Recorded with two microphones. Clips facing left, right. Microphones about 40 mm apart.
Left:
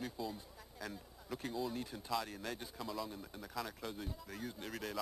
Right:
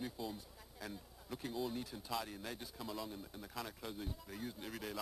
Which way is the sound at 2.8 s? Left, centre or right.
Centre.